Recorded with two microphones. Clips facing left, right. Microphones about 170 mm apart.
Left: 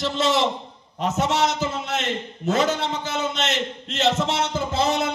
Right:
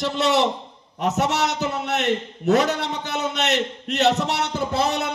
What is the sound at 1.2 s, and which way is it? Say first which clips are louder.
A man's voice: left 2 dB; 70° right (ahead or behind).